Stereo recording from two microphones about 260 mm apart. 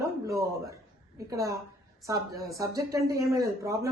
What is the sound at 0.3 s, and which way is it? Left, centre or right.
Speech, centre.